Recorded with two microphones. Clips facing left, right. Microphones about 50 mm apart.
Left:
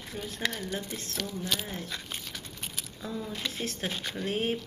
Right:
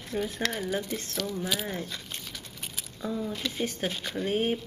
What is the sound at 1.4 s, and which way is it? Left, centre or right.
Speech, centre.